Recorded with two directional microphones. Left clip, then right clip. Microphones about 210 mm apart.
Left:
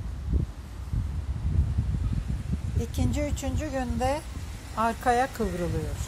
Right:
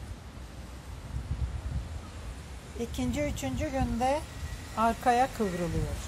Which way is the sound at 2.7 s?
15° left (ahead or behind).